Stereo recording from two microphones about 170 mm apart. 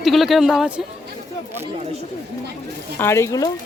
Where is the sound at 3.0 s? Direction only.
15° left (ahead or behind).